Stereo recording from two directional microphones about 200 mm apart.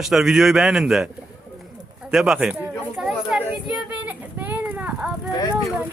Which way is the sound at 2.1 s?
Centre (ahead or behind).